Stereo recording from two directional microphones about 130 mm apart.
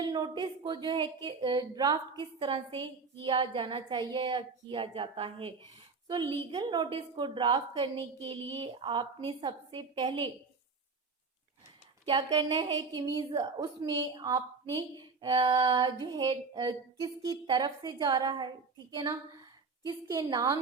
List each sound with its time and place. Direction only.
0.0 s a woman's voice: 35° right (ahead or behind); by 5.5 s 50° right (ahead or behind)
6.5 s a woman's voice: 35° right (ahead or behind)
12.0 s a woman's voice: 35° right (ahead or behind)